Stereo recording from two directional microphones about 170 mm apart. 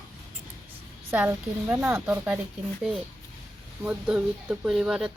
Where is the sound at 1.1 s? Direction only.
10° right (ahead or behind).